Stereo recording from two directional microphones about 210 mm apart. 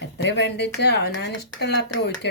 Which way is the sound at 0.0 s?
55° left (ahead or behind).